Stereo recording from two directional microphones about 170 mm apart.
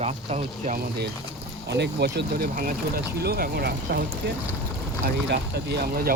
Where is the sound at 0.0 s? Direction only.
40° right (ahead or behind).